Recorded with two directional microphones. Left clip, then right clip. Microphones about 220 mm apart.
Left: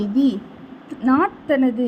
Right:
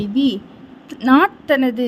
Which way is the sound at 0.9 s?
45° right (ahead or behind).